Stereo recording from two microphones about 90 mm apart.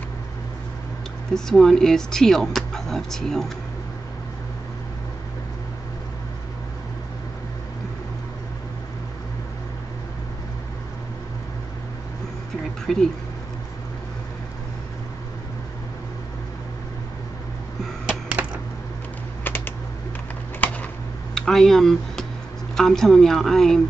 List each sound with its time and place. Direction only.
1.3 s speech: 5° left (ahead or behind)
12.8 s speech: 5° left (ahead or behind)
19.4 s typing: 20° left (ahead or behind)
21.4 s speech: 5° left (ahead or behind)